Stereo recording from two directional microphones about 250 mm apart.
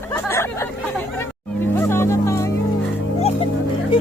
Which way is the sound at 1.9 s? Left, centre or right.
Centre.